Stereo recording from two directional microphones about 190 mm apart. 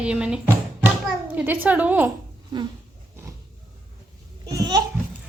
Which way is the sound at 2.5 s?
25° right (ahead or behind).